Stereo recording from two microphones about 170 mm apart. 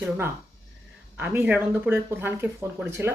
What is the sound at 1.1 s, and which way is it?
Speech, 10° right (ahead or behind).